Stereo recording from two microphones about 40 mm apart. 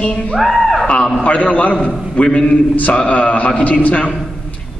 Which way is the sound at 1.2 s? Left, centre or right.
Left.